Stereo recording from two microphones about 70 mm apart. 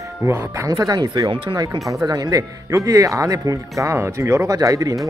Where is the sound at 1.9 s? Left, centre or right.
Right.